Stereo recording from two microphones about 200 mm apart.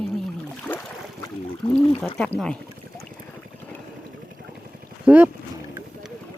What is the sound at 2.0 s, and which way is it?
Speech, 5° left (ahead or behind).